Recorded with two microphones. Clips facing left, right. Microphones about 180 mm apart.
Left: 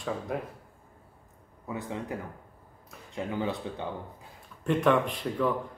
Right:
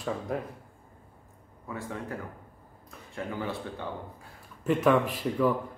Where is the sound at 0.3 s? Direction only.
5° left (ahead or behind).